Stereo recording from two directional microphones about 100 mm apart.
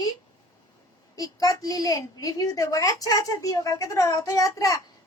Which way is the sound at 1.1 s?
35° left (ahead or behind).